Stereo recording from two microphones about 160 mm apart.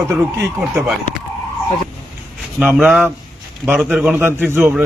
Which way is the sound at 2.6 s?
Centre (ahead or behind).